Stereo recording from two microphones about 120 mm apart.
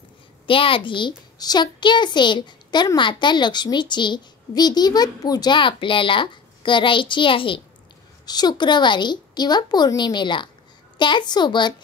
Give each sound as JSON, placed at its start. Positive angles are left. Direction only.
{"t": 0.5, "sound": "a child's voice", "side_deg": 45}
{"t": 8.3, "sound": "a child's voice", "side_deg": 35}